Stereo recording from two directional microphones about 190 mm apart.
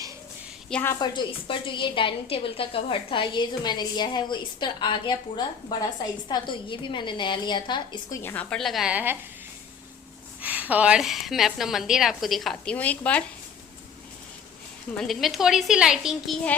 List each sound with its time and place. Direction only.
0.7 s a woman's voice: 10° left (ahead or behind)
8.2 s a woman's voice: 10° left (ahead or behind); by 9.1 s 5° right (ahead or behind)
10.4 s a woman's voice: 10° right (ahead or behind); by 13.2 s 5° left (ahead or behind)
14.9 s a woman's voice: centre (ahead or behind)